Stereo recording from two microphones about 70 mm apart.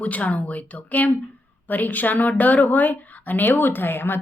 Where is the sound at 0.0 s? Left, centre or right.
Left.